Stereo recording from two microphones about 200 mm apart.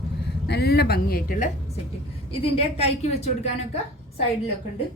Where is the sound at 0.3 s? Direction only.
55° left (ahead or behind).